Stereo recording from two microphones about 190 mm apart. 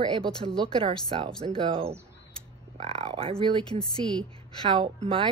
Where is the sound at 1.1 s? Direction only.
30° right (ahead or behind).